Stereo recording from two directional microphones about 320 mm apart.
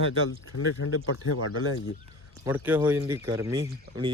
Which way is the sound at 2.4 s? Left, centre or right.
Centre.